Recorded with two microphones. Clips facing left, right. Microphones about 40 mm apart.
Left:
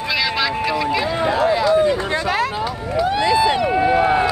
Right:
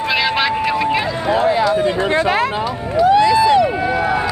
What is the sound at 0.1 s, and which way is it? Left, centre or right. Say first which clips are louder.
Vehicle: right 3 dB; right.